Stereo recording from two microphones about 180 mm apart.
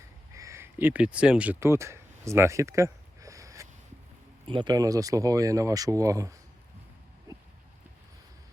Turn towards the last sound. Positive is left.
turn(degrees=-20)  # may be behind; listen again after turning